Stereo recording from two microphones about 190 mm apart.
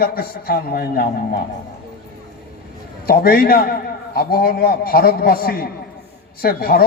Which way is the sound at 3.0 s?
50° left (ahead or behind).